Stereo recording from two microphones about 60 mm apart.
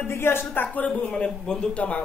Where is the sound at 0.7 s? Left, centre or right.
Left.